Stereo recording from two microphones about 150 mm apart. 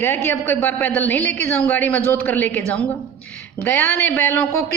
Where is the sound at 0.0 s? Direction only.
15° left (ahead or behind).